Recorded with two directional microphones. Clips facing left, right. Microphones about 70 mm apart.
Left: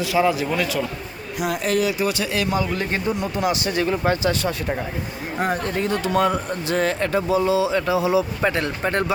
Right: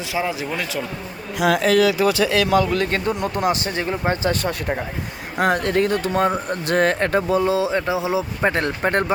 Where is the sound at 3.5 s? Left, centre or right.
Right.